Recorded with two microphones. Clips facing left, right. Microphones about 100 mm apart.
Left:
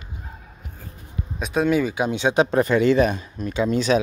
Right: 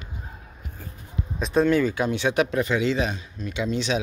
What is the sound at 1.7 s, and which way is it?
Speech, 15° left (ahead or behind).